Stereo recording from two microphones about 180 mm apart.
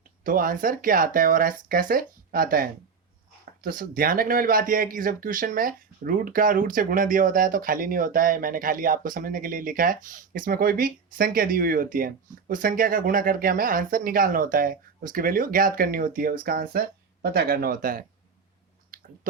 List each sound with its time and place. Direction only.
0.3 s speech: 50° right (ahead or behind)
18.9 s chewing: 50° right (ahead or behind)